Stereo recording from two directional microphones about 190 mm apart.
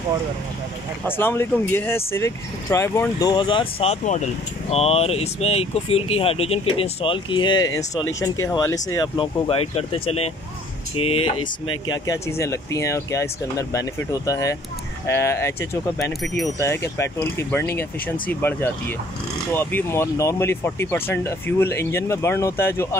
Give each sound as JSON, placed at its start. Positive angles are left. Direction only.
{"t": 1.0, "sound": "speech", "side_deg": 10}
{"t": 11.9, "sound": "speech", "side_deg": 15}